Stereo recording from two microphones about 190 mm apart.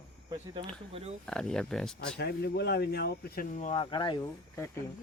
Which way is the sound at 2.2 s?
60° left (ahead or behind).